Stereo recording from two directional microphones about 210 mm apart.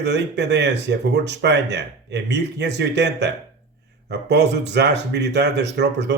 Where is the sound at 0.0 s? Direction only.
55° right (ahead or behind).